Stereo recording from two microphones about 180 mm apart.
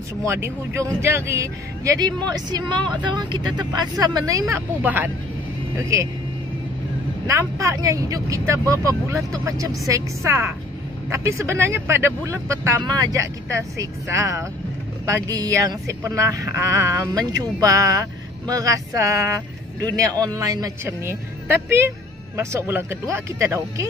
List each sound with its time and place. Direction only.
0.2 s speech: 15° right (ahead or behind)
7.2 s speech: 15° right (ahead or behind)